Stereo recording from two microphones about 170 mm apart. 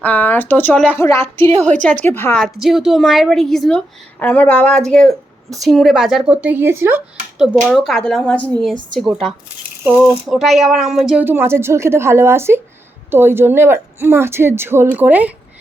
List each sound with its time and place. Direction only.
0.0 s speech: 10° left (ahead or behind)
2.4 s a woman's voice: centre (ahead or behind)
7.3 s a woman's voice: centre (ahead or behind)
9.8 s speech: 10° right (ahead or behind)